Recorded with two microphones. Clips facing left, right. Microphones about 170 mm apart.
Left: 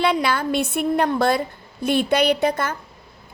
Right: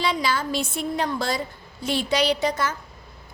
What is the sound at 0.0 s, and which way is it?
A woman's voice, 60° left (ahead or behind).